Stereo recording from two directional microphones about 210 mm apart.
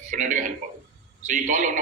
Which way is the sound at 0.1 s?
35° right (ahead or behind).